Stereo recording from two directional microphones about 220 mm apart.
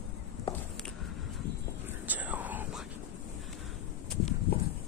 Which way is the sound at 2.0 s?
5° right (ahead or behind).